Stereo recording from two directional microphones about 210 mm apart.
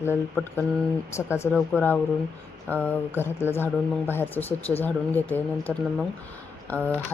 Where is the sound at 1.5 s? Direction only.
5° left (ahead or behind).